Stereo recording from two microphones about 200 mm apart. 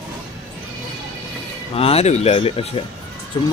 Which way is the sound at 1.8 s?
30° left (ahead or behind).